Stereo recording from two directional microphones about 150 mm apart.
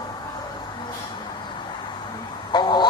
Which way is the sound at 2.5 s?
30° left (ahead or behind).